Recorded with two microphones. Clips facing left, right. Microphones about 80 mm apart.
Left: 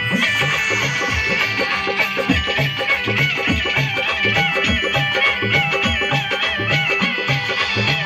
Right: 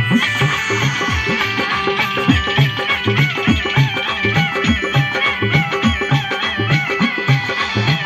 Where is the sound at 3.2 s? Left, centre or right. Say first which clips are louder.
Right 4 dB; right.